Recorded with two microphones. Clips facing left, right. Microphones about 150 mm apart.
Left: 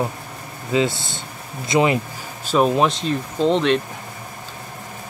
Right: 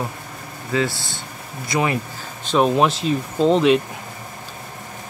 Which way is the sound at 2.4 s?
Centre (ahead or behind).